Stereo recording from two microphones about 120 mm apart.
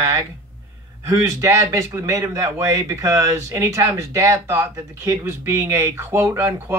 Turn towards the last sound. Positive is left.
turn(degrees=-25)  # may be behind; listen again after turning